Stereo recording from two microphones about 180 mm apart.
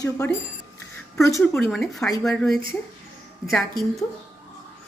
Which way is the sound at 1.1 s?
15° left (ahead or behind).